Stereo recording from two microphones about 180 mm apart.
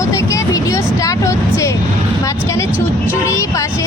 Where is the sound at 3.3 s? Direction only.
15° left (ahead or behind).